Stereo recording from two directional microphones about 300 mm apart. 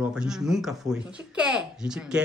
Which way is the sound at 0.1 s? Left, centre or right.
Centre.